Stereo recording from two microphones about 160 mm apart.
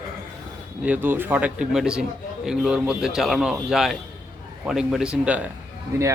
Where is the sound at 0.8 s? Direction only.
10° right (ahead or behind).